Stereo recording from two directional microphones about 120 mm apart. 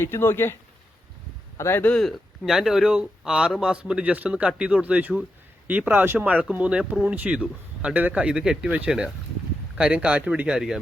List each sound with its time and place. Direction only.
0.0 s speech: 20° left (ahead or behind)
1.5 s speech: 20° left (ahead or behind)
2.0 s speech: centre (ahead or behind)